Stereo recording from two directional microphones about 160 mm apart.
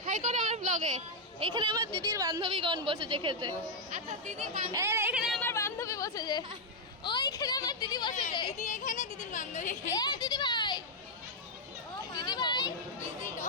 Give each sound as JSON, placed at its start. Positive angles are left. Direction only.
{"t": 0.0, "sound": "a sound", "side_deg": -50}
{"t": 1.5, "sound": "a woman's voice", "side_deg": -30}
{"t": 3.9, "sound": "speech", "side_deg": -50}
{"t": 4.7, "sound": "speech", "side_deg": -15}
{"t": 5.1, "sound": "speech", "side_deg": -5}
{"t": 5.4, "sound": "speech", "side_deg": 15}
{"t": 8.6, "sound": "a sound", "side_deg": 55}
{"t": 9.9, "sound": "speech", "side_deg": 25}
{"t": 12.1, "sound": "a sound", "side_deg": 25}